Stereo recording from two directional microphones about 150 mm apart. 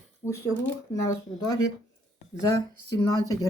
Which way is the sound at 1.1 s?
25° left (ahead or behind).